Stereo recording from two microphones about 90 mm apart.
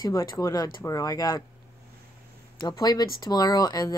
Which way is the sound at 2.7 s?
45° left (ahead or behind).